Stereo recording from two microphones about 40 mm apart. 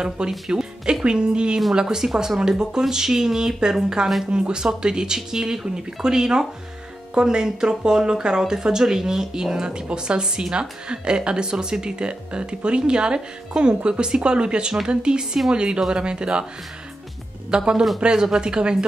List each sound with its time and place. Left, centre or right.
0.5 s music: centre
1.0 s speech: right
17.5 s speech: centre